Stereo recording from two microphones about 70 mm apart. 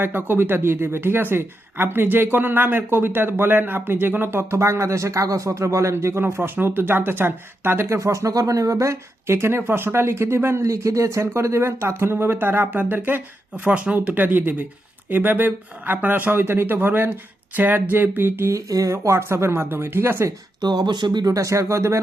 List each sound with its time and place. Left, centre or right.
0.0 s speech: right
18.5 s speech: right
20.6 s speech: right
21.3 s speech: right